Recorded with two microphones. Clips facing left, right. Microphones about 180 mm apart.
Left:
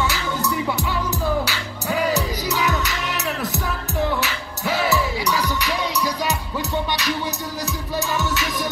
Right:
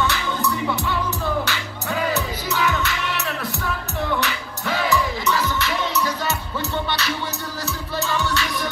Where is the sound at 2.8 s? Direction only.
40° left (ahead or behind).